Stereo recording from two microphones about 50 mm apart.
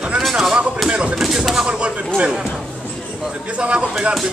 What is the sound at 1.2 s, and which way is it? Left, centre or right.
Speech, centre.